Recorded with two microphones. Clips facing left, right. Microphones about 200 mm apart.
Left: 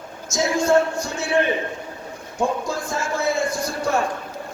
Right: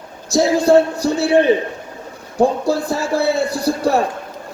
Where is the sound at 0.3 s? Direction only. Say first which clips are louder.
Right 6 dB; 35° right (ahead or behind).